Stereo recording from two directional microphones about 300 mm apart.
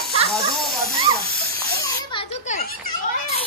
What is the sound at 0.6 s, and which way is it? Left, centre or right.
Hiss, centre.